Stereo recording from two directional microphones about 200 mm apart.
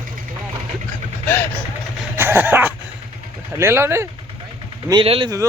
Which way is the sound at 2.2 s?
10° right (ahead or behind).